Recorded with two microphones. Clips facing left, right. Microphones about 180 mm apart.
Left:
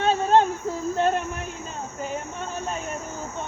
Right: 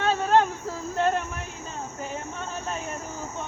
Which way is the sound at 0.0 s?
20° left (ahead or behind).